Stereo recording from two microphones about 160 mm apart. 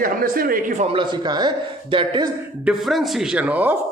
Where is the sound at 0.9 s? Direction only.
30° right (ahead or behind).